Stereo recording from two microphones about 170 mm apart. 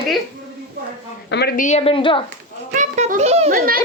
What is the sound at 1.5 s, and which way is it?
Speech, 45° left (ahead or behind).